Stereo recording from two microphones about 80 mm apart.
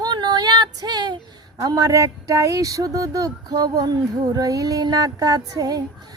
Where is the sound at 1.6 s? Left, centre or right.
Right.